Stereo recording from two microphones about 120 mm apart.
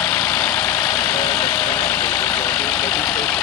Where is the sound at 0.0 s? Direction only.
5° left (ahead or behind).